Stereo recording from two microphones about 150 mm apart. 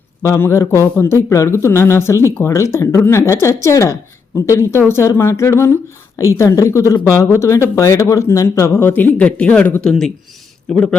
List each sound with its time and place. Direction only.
0.2 s a man's voice: 20° left (ahead or behind)